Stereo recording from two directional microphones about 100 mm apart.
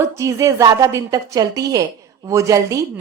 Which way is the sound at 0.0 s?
30° right (ahead or behind).